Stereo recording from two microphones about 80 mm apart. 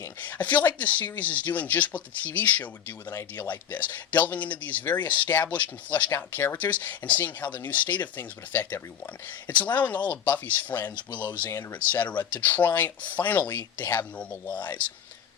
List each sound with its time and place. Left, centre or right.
0.2 s speech: left
3.7 s speech: left
10.9 s speech: left
11.5 s speech: left
14.4 s speech: left